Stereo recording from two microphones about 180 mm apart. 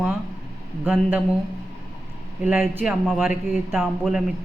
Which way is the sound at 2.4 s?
10° right (ahead or behind).